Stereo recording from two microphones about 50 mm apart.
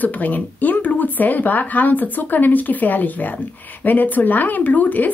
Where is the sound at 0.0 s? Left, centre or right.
Left.